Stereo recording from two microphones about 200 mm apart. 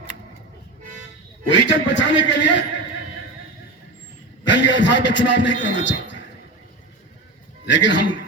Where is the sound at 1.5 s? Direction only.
65° left (ahead or behind).